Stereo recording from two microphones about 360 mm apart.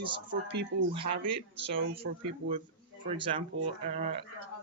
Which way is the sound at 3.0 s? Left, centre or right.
Centre.